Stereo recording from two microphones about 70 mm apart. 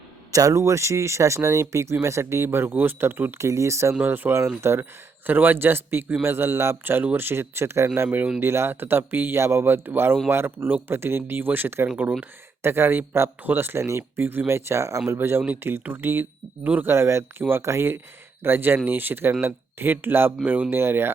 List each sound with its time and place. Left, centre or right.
0.3 s speech: right
3.3 s speech: right
4.0 s a man's voice: right
10.7 s speech: right
10.9 s a man's voice: right
16.9 s a man's voice: right
20.7 s a man's voice: right